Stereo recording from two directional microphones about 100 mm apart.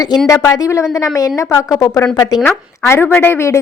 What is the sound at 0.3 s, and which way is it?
A woman's voice, 30° left (ahead or behind).